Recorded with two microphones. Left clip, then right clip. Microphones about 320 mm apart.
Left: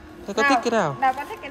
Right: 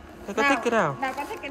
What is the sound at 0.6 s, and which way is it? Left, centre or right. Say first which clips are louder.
Speech: left 1 dB; centre.